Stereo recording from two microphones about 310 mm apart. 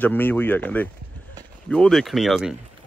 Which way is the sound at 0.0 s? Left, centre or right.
Centre.